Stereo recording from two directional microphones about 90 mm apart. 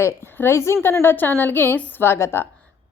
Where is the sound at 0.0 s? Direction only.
25° left (ahead or behind).